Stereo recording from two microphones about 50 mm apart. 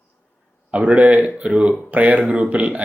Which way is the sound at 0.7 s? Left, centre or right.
Right.